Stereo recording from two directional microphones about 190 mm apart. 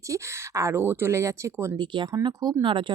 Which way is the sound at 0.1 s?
15° right (ahead or behind).